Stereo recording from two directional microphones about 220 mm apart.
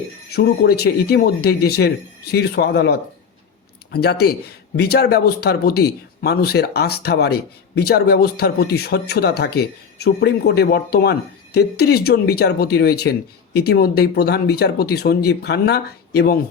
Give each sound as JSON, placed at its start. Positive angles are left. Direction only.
{"t": 0.3, "sound": "speech", "side_deg": 45}